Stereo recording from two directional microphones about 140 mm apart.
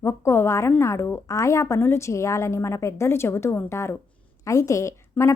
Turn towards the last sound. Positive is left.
turn(degrees=20)  # may be behind; listen again after turning